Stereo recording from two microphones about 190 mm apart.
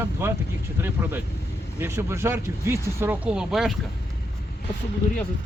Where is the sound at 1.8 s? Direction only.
15° right (ahead or behind).